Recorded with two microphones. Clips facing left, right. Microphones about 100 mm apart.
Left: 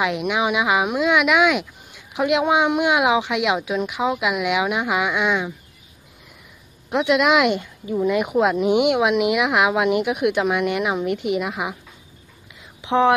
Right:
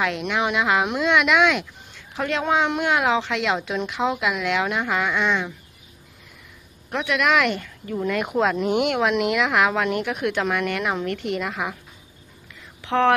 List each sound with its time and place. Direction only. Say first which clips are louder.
0.0 s speech: left 2 dB; 10° left (ahead or behind)
6.9 s speech: left 4 dB; 15° left (ahead or behind)
12.8 s speech: left 2 dB; 15° left (ahead or behind)